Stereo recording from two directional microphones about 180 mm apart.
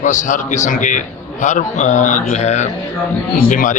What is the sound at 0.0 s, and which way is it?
A man's voice, 45° left (ahead or behind).